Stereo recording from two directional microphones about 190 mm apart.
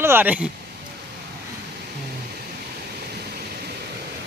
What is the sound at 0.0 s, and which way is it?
Speech, 10° right (ahead or behind).